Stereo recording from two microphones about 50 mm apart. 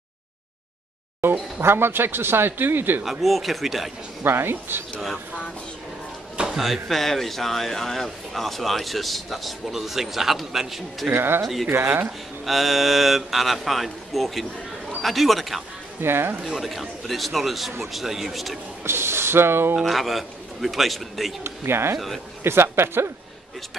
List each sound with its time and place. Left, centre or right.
1.6 s a man's voice: right
3.0 s a man's voice: centre
4.2 s a man's voice: right
6.3 s a sound: centre
6.6 s a man's voice: centre
11.1 s a man's voice: right
11.4 s a man's voice: centre
11.7 s a man's voice: right
12.4 s a man's voice: centre
16.0 s a man's voice: right
16.4 s a man's voice: centre
18.9 s speech: right
19.8 s a man's voice: centre
21.5 s a man's voice: right